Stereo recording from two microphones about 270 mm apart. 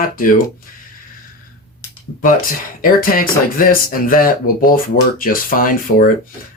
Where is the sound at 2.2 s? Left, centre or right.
Left.